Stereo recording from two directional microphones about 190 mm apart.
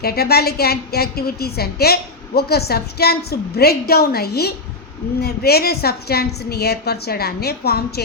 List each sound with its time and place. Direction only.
0.0 s a woman's voice: 55° left (ahead or behind)